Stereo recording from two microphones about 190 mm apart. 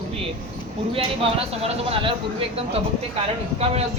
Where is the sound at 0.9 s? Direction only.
30° right (ahead or behind).